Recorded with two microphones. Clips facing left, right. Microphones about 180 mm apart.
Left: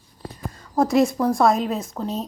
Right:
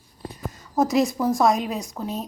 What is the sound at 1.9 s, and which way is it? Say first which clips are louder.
Speech: left 2 dB; 5° right (ahead or behind).